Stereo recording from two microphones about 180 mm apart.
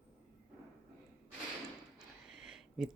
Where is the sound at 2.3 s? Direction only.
5° right (ahead or behind).